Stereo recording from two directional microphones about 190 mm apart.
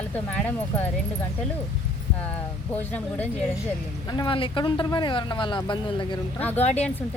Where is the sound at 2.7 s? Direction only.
10° left (ahead or behind).